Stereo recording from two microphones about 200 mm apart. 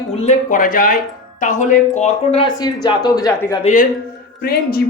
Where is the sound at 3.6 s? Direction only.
35° left (ahead or behind).